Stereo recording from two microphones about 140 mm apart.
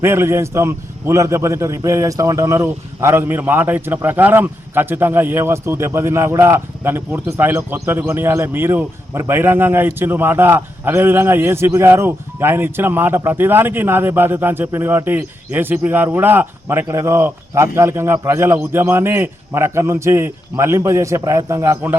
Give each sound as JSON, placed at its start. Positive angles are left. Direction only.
{"t": 0.0, "sound": "a man's voice", "side_deg": -20}